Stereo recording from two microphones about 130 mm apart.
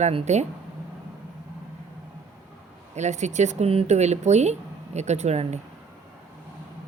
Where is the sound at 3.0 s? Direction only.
65° right (ahead or behind).